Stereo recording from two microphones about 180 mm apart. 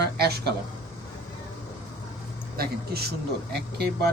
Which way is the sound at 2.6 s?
60° right (ahead or behind).